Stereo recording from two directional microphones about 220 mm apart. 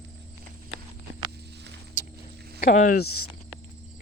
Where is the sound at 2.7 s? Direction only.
35° left (ahead or behind).